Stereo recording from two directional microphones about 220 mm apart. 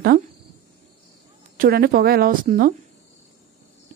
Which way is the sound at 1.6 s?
45° right (ahead or behind).